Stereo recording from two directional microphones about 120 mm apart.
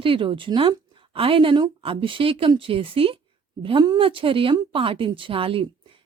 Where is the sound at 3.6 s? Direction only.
40° right (ahead or behind).